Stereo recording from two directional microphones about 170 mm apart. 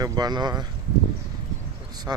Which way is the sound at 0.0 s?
25° right (ahead or behind).